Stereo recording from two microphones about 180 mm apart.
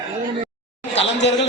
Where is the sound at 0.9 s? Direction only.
75° left (ahead or behind).